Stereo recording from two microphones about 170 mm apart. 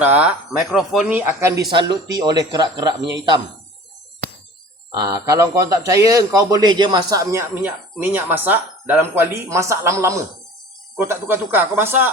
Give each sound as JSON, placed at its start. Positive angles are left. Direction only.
{"t": 0.0, "sound": "speech", "side_deg": -10}
{"t": 1.7, "sound": "speech", "side_deg": -25}
{"t": 4.9, "sound": "speech", "side_deg": -20}